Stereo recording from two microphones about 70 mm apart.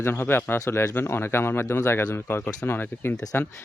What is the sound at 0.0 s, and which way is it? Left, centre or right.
Speech, left.